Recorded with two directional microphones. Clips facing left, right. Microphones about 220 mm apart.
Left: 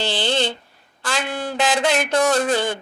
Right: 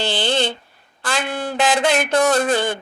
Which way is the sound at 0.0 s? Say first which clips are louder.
Right 1 dB; 55° right (ahead or behind).